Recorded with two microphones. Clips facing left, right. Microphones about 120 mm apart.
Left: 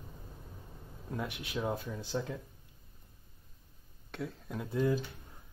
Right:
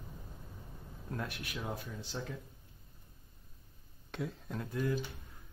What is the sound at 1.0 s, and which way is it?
Speech, 15° left (ahead or behind).